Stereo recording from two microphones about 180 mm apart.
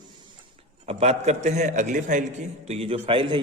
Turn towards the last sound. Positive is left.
turn(degrees=-30)  # may be behind; listen again after turning